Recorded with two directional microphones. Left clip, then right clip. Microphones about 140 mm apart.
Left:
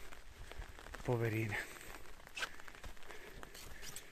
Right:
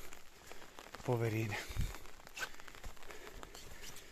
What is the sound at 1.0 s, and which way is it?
Speech, 5° right (ahead or behind).